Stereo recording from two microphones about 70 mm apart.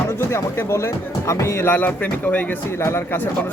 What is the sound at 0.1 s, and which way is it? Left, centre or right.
Speech, left.